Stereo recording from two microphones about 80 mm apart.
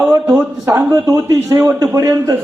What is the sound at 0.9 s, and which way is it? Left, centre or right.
A man's voice, right.